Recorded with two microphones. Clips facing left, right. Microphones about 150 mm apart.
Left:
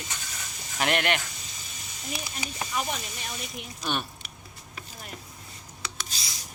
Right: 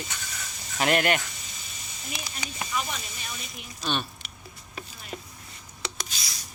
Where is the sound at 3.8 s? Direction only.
15° left (ahead or behind).